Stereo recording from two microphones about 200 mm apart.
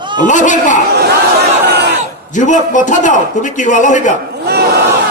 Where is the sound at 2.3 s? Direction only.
40° left (ahead or behind).